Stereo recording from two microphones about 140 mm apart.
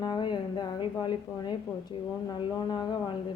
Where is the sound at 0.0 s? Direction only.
30° left (ahead or behind).